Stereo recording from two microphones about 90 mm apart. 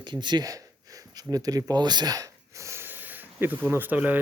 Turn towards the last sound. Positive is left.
turn(degrees=-20)  # may be behind; listen again after turning